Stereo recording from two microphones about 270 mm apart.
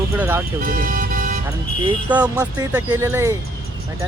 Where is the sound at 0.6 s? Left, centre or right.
Right.